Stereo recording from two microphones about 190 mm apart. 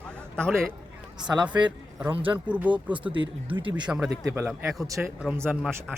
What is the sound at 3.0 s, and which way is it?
Speech, 25° right (ahead or behind).